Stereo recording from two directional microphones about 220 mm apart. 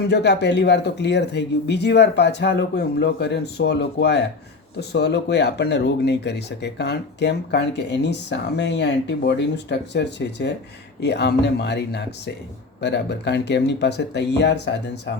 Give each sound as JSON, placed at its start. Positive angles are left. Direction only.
{"t": 0.1, "sound": "speech", "side_deg": 50}